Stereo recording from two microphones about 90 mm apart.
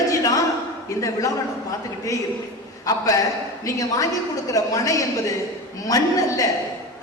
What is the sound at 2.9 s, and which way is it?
A woman's voice, 40° left (ahead or behind).